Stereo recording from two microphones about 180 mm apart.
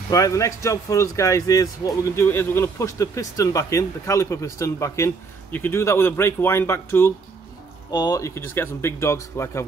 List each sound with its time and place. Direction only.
0.1 s speech: 20° left (ahead or behind)